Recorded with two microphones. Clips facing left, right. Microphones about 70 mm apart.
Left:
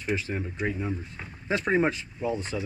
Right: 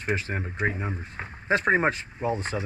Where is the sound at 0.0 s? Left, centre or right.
Right.